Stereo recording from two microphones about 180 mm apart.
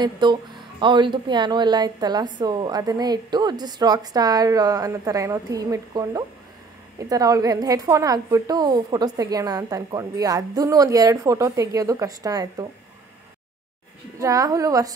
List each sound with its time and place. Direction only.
0.0 s speech: 25° right (ahead or behind)
14.2 s speech: 20° right (ahead or behind)